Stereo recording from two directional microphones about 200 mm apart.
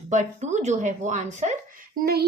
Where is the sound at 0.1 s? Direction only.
35° right (ahead or behind).